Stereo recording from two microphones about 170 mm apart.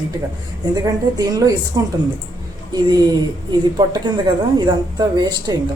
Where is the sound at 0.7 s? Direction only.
25° right (ahead or behind).